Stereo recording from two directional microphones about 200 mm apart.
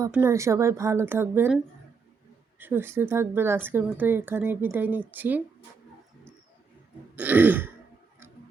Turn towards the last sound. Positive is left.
turn(degrees=-10)  # may be behind; listen again after turning